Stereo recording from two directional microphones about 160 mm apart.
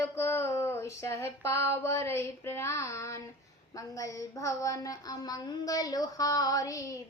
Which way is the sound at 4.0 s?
20° left (ahead or behind).